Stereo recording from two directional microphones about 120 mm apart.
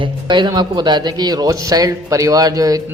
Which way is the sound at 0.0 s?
40° right (ahead or behind).